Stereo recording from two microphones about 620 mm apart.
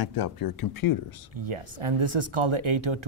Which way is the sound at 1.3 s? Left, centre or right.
Right.